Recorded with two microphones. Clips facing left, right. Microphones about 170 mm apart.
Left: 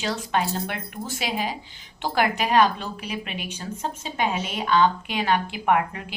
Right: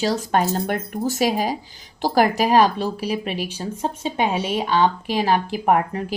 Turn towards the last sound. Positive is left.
turn(degrees=-40)  # may be behind; listen again after turning